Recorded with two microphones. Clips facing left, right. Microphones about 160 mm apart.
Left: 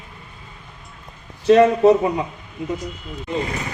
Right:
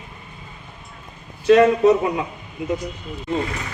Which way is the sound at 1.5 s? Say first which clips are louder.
Left 1 dB; 30° left (ahead or behind).